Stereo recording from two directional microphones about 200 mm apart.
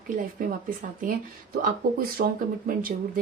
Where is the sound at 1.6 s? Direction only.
50° right (ahead or behind).